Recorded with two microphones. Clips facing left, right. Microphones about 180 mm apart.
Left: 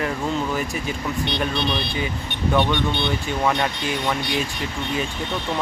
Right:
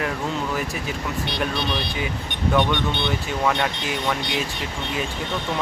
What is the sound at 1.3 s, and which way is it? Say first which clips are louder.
Speech: left 1 dB; 10° right (ahead or behind).